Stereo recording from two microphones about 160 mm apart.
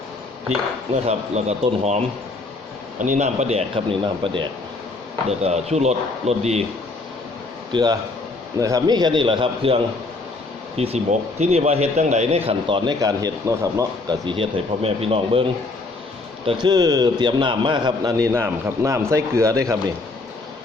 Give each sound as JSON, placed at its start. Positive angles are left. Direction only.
{"t": 1.0, "sound": "a man's voice", "side_deg": -45}
{"t": 3.0, "sound": "a man's voice", "side_deg": -50}
{"t": 5.4, "sound": "a man's voice", "side_deg": -45}
{"t": 7.7, "sound": "a man's voice", "side_deg": -25}
{"t": 12.5, "sound": "speech", "side_deg": -30}
{"t": 16.5, "sound": "a man's voice", "side_deg": -30}